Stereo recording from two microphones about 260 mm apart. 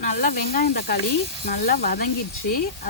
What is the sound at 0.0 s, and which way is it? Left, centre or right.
Speech, left.